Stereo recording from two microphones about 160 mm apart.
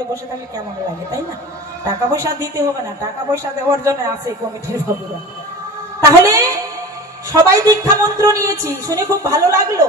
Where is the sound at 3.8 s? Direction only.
20° right (ahead or behind).